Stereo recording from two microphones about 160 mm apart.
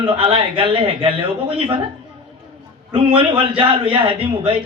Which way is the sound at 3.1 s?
30° right (ahead or behind).